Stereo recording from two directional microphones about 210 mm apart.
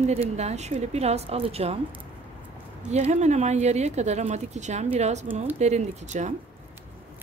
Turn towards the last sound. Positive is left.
turn(degrees=-35)  # may be behind; listen again after turning